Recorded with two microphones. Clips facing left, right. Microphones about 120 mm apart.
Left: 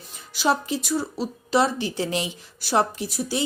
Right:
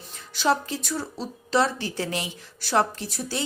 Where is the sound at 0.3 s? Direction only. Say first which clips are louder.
Left 1 dB; 15° left (ahead or behind).